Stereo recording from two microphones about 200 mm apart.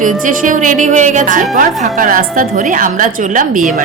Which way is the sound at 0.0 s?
40° right (ahead or behind).